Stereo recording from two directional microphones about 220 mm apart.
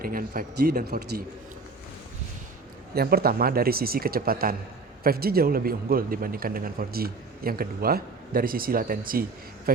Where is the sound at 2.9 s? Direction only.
45° right (ahead or behind).